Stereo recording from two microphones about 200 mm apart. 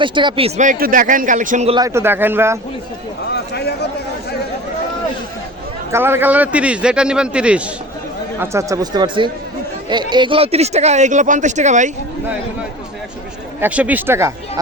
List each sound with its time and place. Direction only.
0.0 s speech: 25° right (ahead or behind)
1.7 s a man's voice: 15° right (ahead or behind)
3.3 s a man's voice: 55° left (ahead or behind)
5.9 s a man's voice: 10° right (ahead or behind); by 11.9 s 35° right (ahead or behind)
13.6 s a man's voice: 5° right (ahead or behind)